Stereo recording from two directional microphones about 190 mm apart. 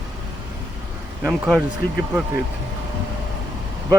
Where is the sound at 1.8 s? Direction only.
55° left (ahead or behind).